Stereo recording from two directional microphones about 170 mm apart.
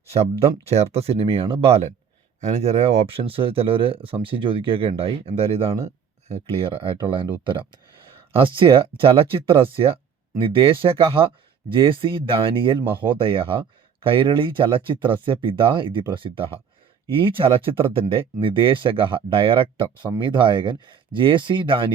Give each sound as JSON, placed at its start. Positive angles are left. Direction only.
{"t": 0.1, "sound": "speech", "side_deg": -40}
{"t": 8.4, "sound": "speech", "side_deg": -30}